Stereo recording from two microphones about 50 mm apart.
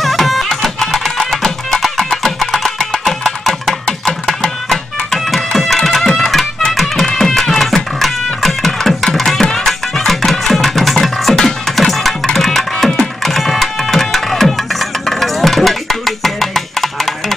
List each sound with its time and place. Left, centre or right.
0.0 s music: centre